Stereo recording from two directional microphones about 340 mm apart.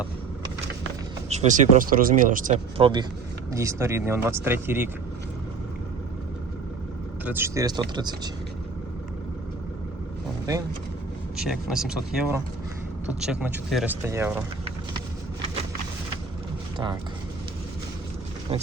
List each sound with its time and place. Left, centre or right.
1.3 s speech: right
7.3 s speech: centre
11.3 s speech: centre
16.7 s speech: centre